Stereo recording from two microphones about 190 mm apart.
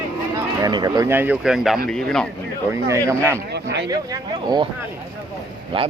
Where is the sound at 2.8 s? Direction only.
15° right (ahead or behind).